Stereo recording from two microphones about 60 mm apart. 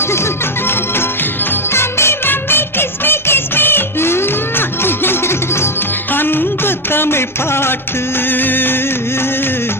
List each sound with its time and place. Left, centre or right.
0.0 s music: left